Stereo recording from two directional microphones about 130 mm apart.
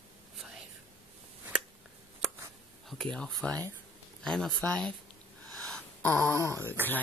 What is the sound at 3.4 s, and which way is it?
Speech, 5° left (ahead or behind).